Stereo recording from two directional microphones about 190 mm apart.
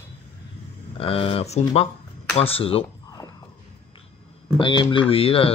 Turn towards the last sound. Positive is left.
turn(degrees=30)  # may be behind; listen again after turning